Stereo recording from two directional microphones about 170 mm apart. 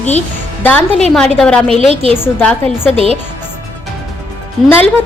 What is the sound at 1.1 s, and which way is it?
A woman's voice, 5° left (ahead or behind).